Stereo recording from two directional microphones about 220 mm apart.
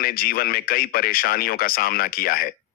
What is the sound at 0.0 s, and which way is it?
A man's voice, 40° left (ahead or behind).